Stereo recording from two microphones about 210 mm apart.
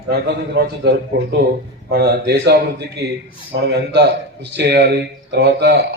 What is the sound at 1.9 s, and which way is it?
A man's voice, 50° right (ahead or behind).